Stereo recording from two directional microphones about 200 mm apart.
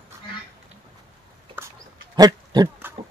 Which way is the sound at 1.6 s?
10° right (ahead or behind).